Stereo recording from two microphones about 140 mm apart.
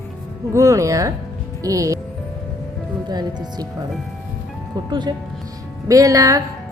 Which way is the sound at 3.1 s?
30° right (ahead or behind).